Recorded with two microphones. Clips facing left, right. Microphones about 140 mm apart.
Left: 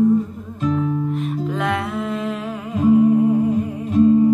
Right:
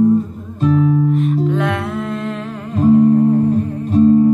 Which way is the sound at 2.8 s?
Centre (ahead or behind).